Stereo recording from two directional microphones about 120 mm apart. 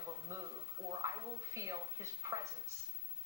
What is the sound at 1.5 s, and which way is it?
Speech, 25° right (ahead or behind).